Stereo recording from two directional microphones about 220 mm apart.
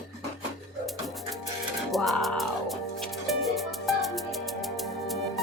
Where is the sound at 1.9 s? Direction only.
Centre (ahead or behind).